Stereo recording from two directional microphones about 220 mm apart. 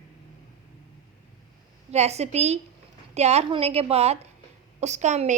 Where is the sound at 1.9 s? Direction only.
30° right (ahead or behind).